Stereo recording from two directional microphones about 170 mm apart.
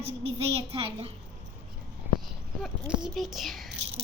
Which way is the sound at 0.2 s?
35° right (ahead or behind).